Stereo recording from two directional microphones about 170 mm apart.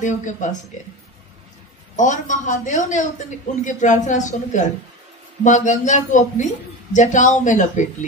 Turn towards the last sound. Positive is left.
turn(degrees=45)  # may be behind; listen again after turning